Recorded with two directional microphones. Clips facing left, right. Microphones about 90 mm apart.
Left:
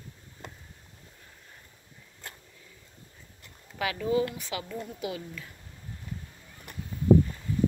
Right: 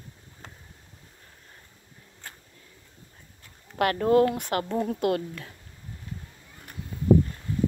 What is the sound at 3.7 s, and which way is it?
Speech, 60° right (ahead or behind).